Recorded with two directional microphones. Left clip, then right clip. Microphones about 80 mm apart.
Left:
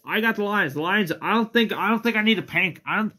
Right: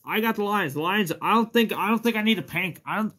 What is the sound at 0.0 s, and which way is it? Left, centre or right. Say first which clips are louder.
Speech: left 2 dB; right.